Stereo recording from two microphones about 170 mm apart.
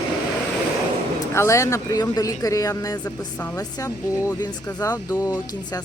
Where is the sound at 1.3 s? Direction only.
15° left (ahead or behind).